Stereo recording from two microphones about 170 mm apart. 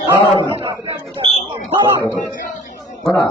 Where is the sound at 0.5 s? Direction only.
30° right (ahead or behind).